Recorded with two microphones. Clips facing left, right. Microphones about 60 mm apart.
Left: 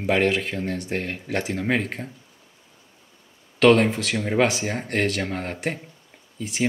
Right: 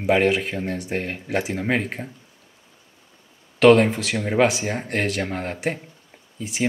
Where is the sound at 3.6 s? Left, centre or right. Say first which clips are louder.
Right 2 dB; centre.